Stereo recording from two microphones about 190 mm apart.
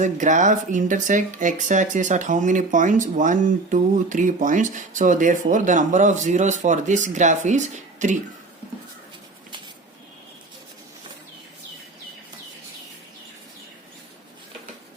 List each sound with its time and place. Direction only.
0.0 s speech: 40° right (ahead or behind)